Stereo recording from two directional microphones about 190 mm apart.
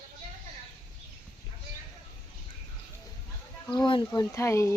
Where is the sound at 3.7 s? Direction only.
25° left (ahead or behind).